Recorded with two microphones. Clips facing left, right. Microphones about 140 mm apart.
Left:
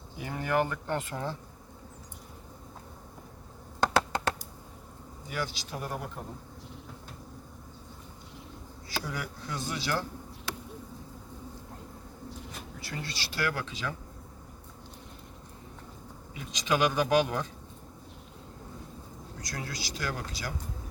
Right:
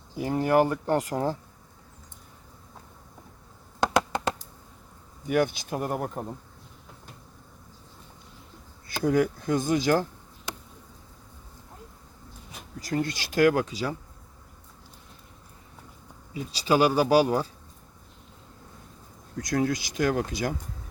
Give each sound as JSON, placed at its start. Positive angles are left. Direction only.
{"t": 0.2, "sound": "speech", "side_deg": -35}
{"t": 3.8, "sound": "a sound", "side_deg": -15}
{"t": 5.3, "sound": "speech", "side_deg": -55}
{"t": 9.0, "sound": "speech", "side_deg": -50}
{"t": 12.8, "sound": "speech", "side_deg": -45}
{"t": 16.3, "sound": "speech", "side_deg": -35}
{"t": 19.4, "sound": "speech", "side_deg": -50}